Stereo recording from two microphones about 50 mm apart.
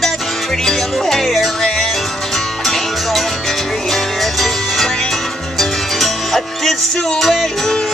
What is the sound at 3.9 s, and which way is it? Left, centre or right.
Music, centre.